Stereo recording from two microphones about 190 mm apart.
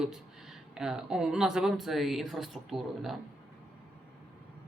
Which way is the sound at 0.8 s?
5° right (ahead or behind).